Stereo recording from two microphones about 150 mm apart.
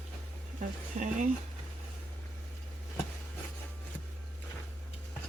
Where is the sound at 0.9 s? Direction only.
50° right (ahead or behind).